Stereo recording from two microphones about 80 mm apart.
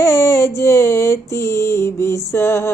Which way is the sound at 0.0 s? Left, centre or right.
Left.